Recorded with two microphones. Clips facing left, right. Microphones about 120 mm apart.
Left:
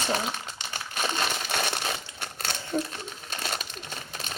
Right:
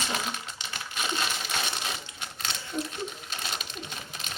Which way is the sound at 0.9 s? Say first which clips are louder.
Left 3 dB; 50° left (ahead or behind).